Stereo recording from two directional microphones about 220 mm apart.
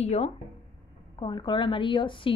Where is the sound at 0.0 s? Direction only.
30° left (ahead or behind).